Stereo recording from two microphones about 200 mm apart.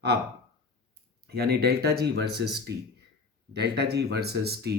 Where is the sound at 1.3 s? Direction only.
50° right (ahead or behind).